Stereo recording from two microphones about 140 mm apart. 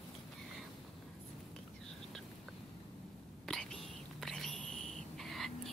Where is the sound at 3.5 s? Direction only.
5° left (ahead or behind).